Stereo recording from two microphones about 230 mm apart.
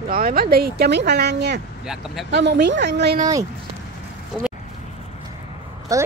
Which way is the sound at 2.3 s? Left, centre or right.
Right.